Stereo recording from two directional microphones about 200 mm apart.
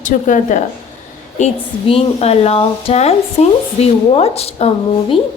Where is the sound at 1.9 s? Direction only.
30° left (ahead or behind).